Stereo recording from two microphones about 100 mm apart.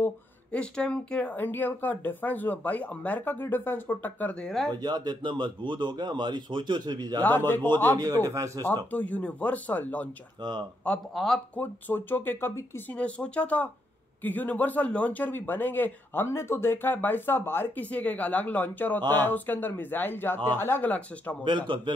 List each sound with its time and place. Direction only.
0.0 s speech: 10° left (ahead or behind)
4.5 s speech: 5° left (ahead or behind)
4.7 s speech: 45° right (ahead or behind)
7.2 s speech: 20° left (ahead or behind)
8.0 s speech: 35° right (ahead or behind)
8.6 s speech: 15° left (ahead or behind)
10.4 s speech: 45° right (ahead or behind)
11.1 s speech: 5° left (ahead or behind)
11.5 s speech: 20° left (ahead or behind)
21.6 s speech: 55° right (ahead or behind)